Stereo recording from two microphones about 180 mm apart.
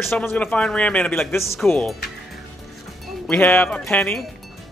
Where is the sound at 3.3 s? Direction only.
10° left (ahead or behind).